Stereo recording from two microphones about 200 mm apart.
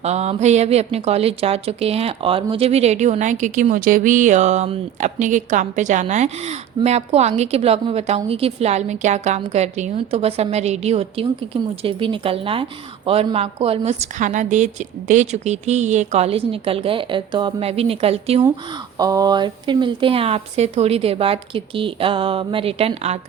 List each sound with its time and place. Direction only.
0.0 s a woman's voice: 35° right (ahead or behind)
18.9 s speech: 20° right (ahead or behind)